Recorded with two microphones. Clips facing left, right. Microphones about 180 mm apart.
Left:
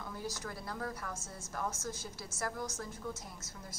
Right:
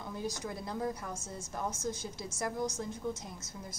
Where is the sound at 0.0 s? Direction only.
20° right (ahead or behind).